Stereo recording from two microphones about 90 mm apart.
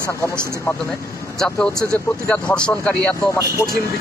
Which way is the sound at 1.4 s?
10° left (ahead or behind).